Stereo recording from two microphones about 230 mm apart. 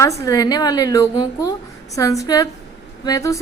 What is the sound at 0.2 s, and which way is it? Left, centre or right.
A woman's voice, centre.